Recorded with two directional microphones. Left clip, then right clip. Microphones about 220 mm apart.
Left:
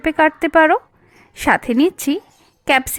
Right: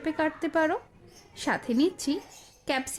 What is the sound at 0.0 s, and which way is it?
Speech, 30° left (ahead or behind).